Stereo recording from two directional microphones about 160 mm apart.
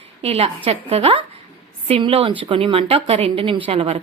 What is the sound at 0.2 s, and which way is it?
Speech, 40° right (ahead or behind).